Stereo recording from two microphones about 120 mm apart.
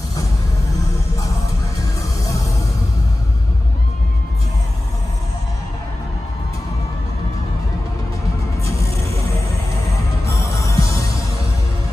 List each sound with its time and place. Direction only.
10.2 s music: 25° left (ahead or behind)